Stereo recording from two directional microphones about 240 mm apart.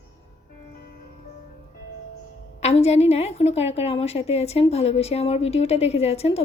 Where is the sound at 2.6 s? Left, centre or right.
Left.